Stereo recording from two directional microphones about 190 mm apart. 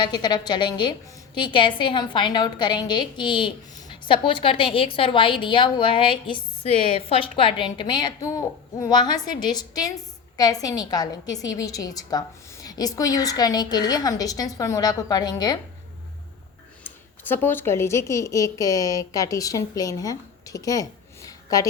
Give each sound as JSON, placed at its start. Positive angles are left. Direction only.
{"t": 0.0, "sound": "a woman's voice", "side_deg": 20}
{"t": 16.8, "sound": "speech", "side_deg": 10}